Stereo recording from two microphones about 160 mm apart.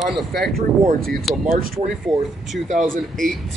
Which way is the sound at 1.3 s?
Centre (ahead or behind).